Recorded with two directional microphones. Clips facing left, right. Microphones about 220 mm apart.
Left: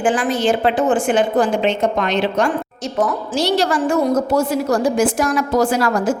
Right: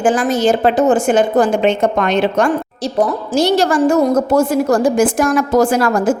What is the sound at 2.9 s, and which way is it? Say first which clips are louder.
A woman's voice: right 4 dB; 40° right (ahead or behind).